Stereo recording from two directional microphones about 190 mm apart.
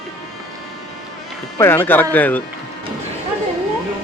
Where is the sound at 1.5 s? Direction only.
10° left (ahead or behind).